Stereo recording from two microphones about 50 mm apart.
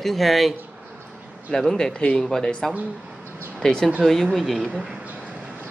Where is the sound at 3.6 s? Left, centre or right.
Centre.